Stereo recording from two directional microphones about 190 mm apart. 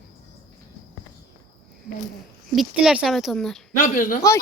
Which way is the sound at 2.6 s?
Centre (ahead or behind).